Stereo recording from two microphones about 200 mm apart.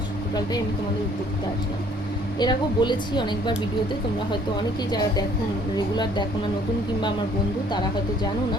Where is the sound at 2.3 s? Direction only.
20° left (ahead or behind).